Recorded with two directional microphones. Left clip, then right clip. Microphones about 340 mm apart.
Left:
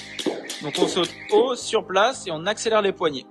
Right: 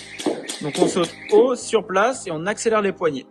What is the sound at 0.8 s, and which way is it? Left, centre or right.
Speech, centre.